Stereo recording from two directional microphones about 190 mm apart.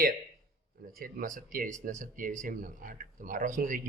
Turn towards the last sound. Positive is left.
turn(degrees=-45)  # may be behind; listen again after turning